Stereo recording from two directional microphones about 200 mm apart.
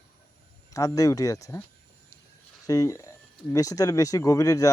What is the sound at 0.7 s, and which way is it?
Speech, 15° left (ahead or behind).